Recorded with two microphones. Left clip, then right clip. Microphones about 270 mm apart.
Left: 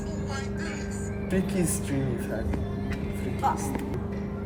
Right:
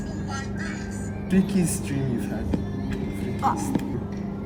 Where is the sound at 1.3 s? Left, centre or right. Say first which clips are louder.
Right 3 dB; left.